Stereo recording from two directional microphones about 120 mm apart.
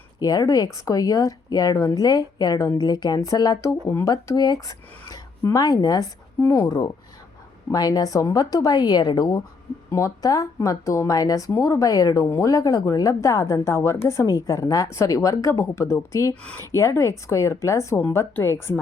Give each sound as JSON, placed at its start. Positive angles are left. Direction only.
{"t": 0.2, "sound": "speech", "side_deg": 30}
{"t": 3.8, "sound": "a woman's voice", "side_deg": 20}
{"t": 4.1, "sound": "a woman's voice", "side_deg": 35}
{"t": 16.3, "sound": "speech", "side_deg": 10}
{"t": 16.6, "sound": "a woman's voice", "side_deg": 20}